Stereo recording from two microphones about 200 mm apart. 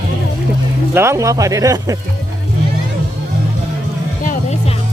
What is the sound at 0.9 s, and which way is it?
Speech, 15° right (ahead or behind).